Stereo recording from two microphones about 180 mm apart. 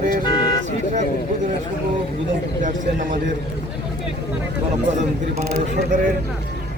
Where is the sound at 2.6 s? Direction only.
45° right (ahead or behind).